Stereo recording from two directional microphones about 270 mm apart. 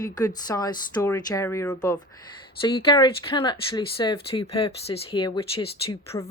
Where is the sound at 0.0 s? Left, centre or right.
Centre.